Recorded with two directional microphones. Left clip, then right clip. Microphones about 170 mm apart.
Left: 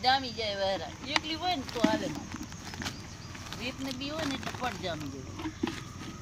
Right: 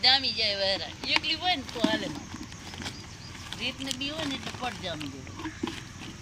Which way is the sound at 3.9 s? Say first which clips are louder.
Right 2 dB; 50° left (ahead or behind).